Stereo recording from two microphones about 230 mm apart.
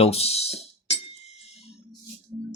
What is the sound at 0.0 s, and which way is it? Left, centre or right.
Music, left.